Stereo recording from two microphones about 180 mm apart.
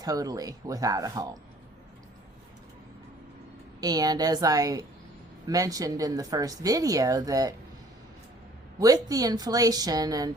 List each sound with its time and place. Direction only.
0.0 s speech: 20° right (ahead or behind)
3.8 s speech: 20° right (ahead or behind)
8.8 s speech: 20° right (ahead or behind)